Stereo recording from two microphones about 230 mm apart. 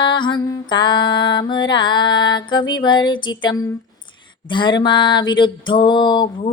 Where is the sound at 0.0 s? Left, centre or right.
Left.